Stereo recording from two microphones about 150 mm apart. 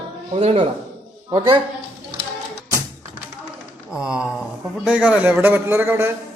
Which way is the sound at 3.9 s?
5° right (ahead or behind).